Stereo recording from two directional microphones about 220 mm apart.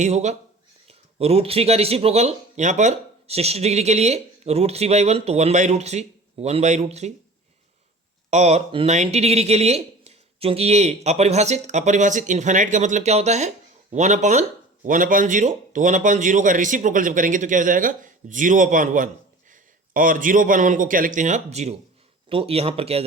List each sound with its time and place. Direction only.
0.0 s a man's voice: 30° right (ahead or behind)
8.3 s a man's voice: 30° right (ahead or behind)